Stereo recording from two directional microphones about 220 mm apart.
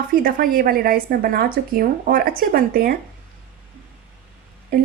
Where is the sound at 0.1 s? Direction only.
40° right (ahead or behind).